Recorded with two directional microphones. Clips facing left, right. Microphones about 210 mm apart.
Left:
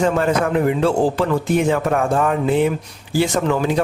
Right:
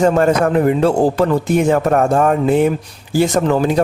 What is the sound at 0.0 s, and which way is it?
Speech, 45° right (ahead or behind).